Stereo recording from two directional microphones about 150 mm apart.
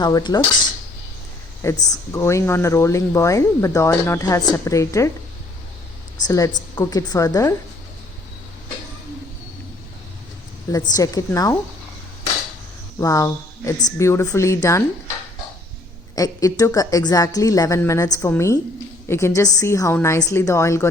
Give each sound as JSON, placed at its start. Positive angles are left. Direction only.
{"t": 0.0, "sound": "speech", "side_deg": 30}
{"t": 1.6, "sound": "speech", "side_deg": 20}
{"t": 6.2, "sound": "speech", "side_deg": 20}
{"t": 10.9, "sound": "speech", "side_deg": 25}
{"t": 13.0, "sound": "speech", "side_deg": 20}
{"t": 16.1, "sound": "speech", "side_deg": 25}